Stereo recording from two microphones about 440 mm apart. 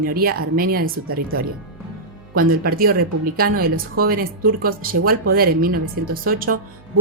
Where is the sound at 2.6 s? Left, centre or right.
Centre.